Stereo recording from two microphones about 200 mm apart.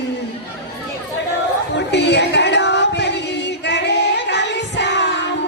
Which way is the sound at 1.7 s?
60° left (ahead or behind).